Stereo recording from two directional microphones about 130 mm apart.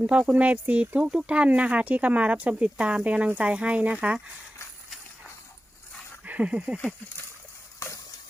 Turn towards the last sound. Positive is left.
turn(degrees=20)  # may be behind; listen again after turning